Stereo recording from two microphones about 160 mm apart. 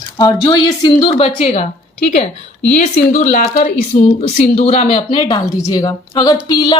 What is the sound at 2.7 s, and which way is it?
Speech, 50° left (ahead or behind).